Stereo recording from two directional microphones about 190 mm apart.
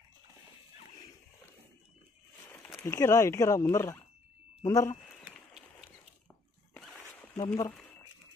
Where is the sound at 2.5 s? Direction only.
10° left (ahead or behind).